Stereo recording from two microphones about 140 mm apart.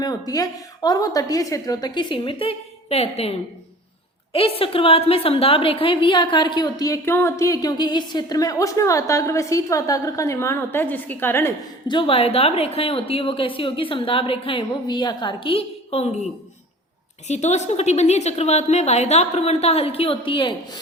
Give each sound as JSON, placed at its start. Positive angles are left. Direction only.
{"t": 0.0, "sound": "a woman's voice", "side_deg": 25}
{"t": 11.9, "sound": "a woman's voice", "side_deg": 40}
{"t": 17.2, "sound": "a woman's voice", "side_deg": 55}